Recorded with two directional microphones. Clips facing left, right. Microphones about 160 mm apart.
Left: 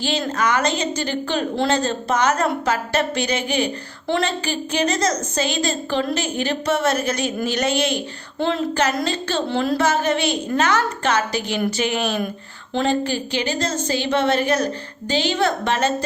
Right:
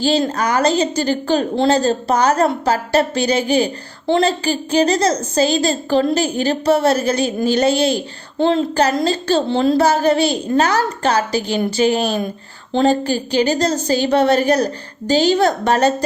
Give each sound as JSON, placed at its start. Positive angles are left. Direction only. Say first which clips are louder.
{"t": 0.0, "sound": "a woman's voice", "louder": "right 5 dB", "side_deg": -35}